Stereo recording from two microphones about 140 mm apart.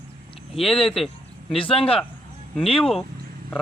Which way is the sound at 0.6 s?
Centre (ahead or behind).